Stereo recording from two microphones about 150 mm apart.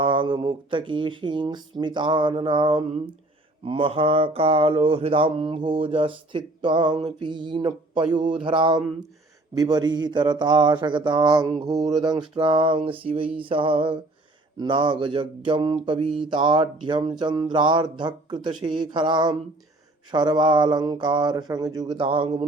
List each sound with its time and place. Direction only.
0.0 s mantra: 35° right (ahead or behind)
9.6 s a sound: 30° right (ahead or behind)
12.0 s mantra: 30° right (ahead or behind)
16.0 s speech: 5° right (ahead or behind)
16.3 s mantra: 30° right (ahead or behind)
20.1 s a sound: 30° right (ahead or behind)